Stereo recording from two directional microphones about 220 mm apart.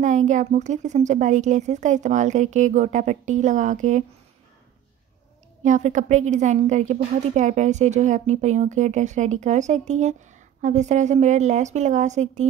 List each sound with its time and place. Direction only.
0.0 s a woman's voice: 35° right (ahead or behind)
5.6 s a woman's voice: 30° right (ahead or behind)